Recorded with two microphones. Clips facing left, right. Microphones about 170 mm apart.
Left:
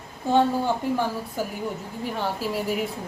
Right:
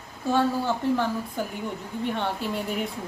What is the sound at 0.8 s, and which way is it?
A woman's voice, 15° left (ahead or behind).